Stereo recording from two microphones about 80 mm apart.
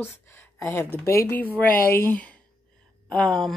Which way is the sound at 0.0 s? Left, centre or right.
Left.